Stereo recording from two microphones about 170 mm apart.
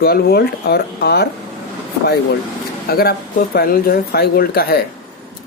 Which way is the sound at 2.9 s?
65° left (ahead or behind).